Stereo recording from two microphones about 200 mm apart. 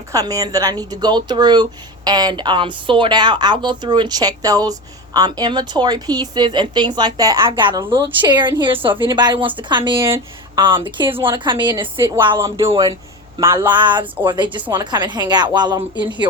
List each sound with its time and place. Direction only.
0.1 s a woman's voice: 15° right (ahead or behind)